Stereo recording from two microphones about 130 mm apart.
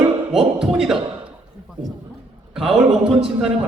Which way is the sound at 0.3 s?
5° right (ahead or behind).